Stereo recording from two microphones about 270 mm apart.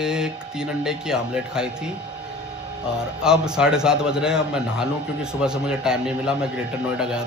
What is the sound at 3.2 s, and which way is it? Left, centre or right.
A man's voice, centre.